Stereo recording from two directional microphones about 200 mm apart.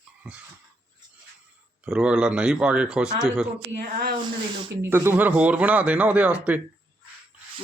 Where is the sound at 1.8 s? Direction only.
5° right (ahead or behind).